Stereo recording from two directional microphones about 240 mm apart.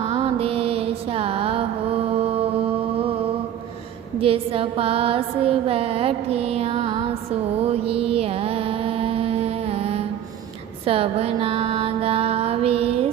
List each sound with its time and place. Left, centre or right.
0.0 s mantra: right
4.2 s a sound: right
7.7 s mantra: right
10.8 s music: right